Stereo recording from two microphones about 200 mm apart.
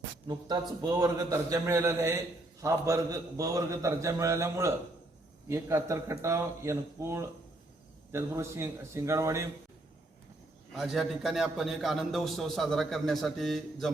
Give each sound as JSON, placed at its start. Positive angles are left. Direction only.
{"t": 0.3, "sound": "a man's voice", "side_deg": -20}
{"t": 10.7, "sound": "a man's voice", "side_deg": 0}